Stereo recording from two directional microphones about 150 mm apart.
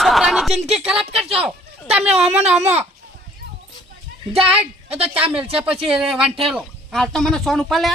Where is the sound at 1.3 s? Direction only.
5° right (ahead or behind).